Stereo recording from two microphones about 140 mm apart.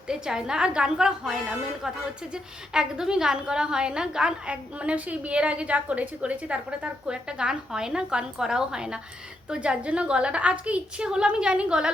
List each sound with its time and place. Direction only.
0.1 s a woman's voice: 5° right (ahead or behind)